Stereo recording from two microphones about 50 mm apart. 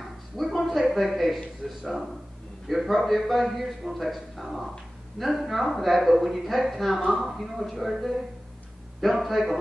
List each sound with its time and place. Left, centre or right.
0.0 s a man's voice: centre